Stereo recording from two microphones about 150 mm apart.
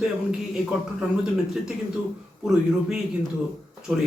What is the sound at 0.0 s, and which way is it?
A man's voice, 5° right (ahead or behind).